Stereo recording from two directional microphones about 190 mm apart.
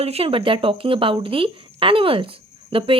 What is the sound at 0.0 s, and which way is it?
Speech, 30° right (ahead or behind).